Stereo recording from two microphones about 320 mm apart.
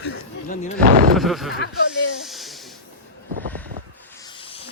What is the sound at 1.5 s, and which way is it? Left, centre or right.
Speech, left.